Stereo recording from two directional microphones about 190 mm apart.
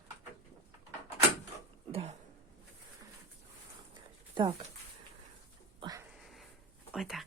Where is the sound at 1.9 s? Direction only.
35° right (ahead or behind).